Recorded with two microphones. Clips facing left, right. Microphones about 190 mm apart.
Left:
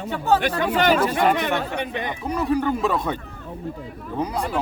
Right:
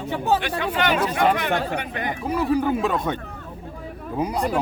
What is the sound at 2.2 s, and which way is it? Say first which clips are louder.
Speech: right 1 dB; 5° right (ahead or behind).